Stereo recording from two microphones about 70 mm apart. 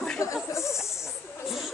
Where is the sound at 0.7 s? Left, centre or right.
Centre.